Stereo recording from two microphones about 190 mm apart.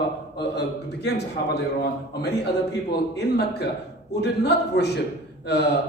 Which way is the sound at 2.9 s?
60° left (ahead or behind).